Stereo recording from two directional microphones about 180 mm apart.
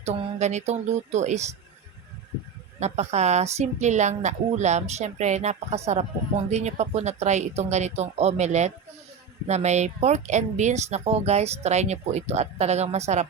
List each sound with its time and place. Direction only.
0.0 s speech: 35° right (ahead or behind)
2.8 s speech: 40° right (ahead or behind)